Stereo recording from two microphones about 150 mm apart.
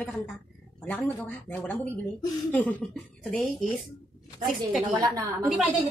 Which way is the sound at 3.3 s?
Centre (ahead or behind).